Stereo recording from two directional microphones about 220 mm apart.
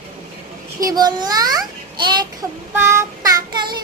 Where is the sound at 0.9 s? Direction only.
20° right (ahead or behind).